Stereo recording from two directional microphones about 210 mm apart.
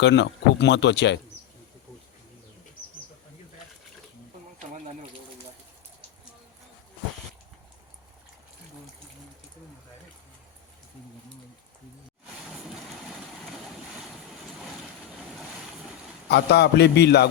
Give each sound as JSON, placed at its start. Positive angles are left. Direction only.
{"t": 0.0, "sound": "speech", "side_deg": 55}
{"t": 16.3, "sound": "a man's voice", "side_deg": 50}